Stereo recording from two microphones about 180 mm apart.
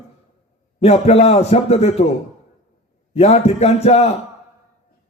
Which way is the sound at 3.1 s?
35° left (ahead or behind).